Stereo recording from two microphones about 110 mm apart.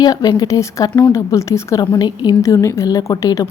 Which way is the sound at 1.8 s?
40° left (ahead or behind).